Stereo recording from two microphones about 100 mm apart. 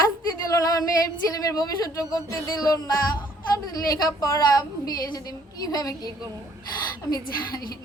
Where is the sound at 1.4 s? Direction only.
40° left (ahead or behind).